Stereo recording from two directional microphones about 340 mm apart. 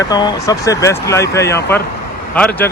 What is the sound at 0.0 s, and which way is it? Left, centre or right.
Speech, centre.